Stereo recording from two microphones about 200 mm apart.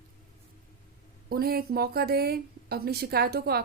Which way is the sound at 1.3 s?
50° right (ahead or behind).